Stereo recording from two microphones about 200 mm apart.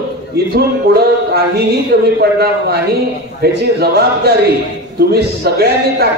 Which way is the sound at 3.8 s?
50° right (ahead or behind).